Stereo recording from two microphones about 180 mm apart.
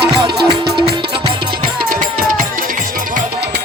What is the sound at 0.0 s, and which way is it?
Music, 25° right (ahead or behind).